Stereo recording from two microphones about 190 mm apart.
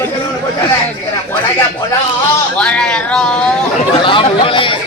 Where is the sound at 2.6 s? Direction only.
5° left (ahead or behind).